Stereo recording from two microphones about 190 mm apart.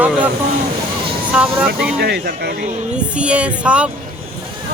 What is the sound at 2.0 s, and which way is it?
Speech, 55° right (ahead or behind).